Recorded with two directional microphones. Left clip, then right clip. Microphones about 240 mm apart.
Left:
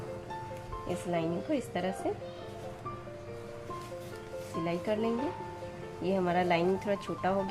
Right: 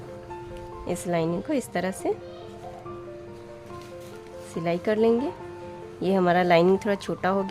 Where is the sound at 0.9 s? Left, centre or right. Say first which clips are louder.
Right 7 dB; right.